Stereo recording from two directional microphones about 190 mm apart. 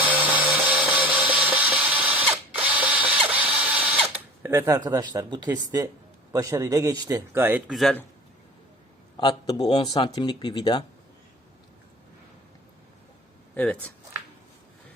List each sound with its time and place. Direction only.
0.1 s a sound: 10° right (ahead or behind)
4.4 s speech: 15° right (ahead or behind)
7.7 s speech: centre (ahead or behind)
9.1 s speech: 20° left (ahead or behind)